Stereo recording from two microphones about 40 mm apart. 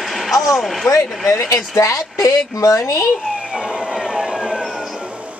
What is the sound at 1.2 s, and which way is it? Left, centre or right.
Speech, centre.